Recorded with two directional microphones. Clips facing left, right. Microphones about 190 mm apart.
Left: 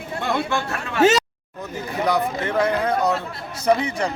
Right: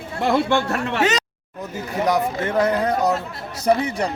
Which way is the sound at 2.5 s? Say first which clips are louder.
Right 1 dB; 40° right (ahead or behind).